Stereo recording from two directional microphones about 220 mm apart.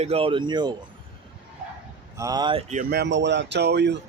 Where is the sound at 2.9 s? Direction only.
50° right (ahead or behind).